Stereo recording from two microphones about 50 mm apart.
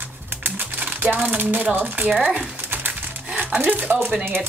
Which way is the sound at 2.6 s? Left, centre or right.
Right.